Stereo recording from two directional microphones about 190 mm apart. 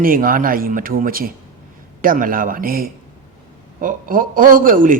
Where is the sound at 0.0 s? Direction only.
45° right (ahead or behind).